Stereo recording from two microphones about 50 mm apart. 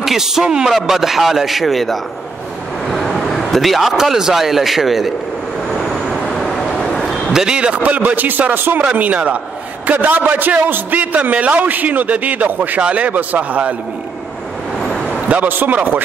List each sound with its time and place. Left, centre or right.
0.0 s a man's voice: centre
5.7 s vehicle: centre
7.3 s a man's voice: centre
7.8 s a man's voice: right
15.4 s a man's voice: right